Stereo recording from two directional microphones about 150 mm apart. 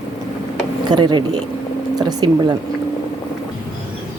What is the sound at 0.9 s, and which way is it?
Speech, 30° right (ahead or behind).